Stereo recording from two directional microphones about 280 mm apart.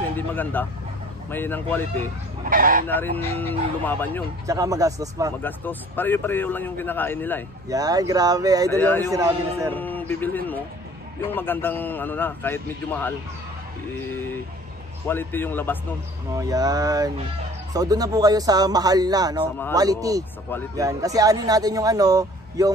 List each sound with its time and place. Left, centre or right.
0.1 s a man's voice: centre
2.5 s speech: right
2.9 s a man's voice: centre
4.5 s a man's voice: centre
5.4 s a man's voice: centre
7.7 s a man's voice: centre
8.7 s a man's voice: centre
9.1 s a man's voice: centre
9.8 s a man's voice: centre
16.3 s a man's voice: centre